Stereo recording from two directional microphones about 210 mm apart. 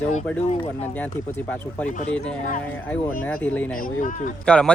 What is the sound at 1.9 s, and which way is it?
Speech, 35° left (ahead or behind).